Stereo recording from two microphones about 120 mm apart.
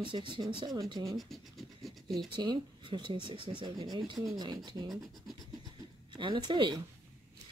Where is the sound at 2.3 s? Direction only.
40° right (ahead or behind).